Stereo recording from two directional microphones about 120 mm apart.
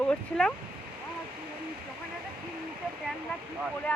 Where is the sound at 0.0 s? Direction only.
10° left (ahead or behind).